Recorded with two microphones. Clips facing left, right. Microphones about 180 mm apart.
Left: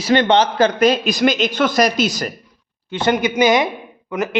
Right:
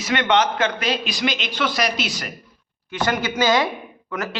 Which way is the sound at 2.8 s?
25° left (ahead or behind).